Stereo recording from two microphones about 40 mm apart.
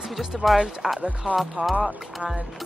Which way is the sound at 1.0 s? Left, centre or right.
Right.